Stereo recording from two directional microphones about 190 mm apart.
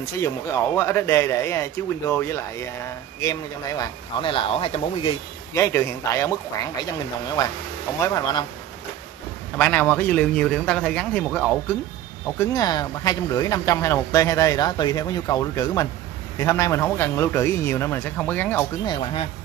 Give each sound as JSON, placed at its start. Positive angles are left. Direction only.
{"t": 0.2, "sound": "a man's voice", "side_deg": 15}
{"t": 5.5, "sound": "a man's voice", "side_deg": 15}
{"t": 7.4, "sound": "speech", "side_deg": 20}
{"t": 9.6, "sound": "a man's voice", "side_deg": 10}
{"t": 12.4, "sound": "a man's voice", "side_deg": 20}
{"t": 18.9, "sound": "speech", "side_deg": 25}